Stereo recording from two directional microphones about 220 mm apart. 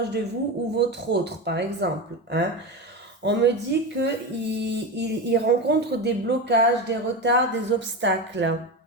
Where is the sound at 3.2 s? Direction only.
50° right (ahead or behind).